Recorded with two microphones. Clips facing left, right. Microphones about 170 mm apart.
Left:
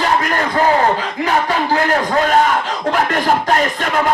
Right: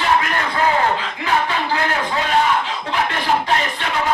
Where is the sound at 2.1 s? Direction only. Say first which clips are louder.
Left 6 dB; 45° left (ahead or behind).